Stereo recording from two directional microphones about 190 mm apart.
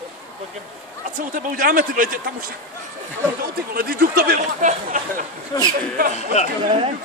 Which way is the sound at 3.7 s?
50° right (ahead or behind).